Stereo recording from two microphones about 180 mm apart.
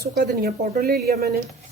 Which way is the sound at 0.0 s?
55° right (ahead or behind).